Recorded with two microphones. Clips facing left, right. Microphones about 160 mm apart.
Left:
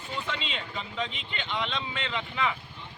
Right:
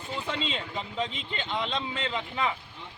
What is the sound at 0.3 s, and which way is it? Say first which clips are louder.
Speech: right 3 dB; 35° right (ahead or behind).